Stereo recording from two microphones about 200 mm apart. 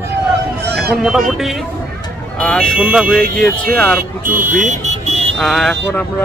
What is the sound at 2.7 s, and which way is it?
Speech, 5° right (ahead or behind).